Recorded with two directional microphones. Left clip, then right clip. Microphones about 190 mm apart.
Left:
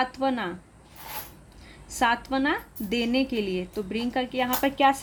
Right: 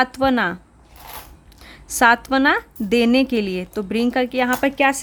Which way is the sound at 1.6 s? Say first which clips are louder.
Right 9 dB; 40° right (ahead or behind).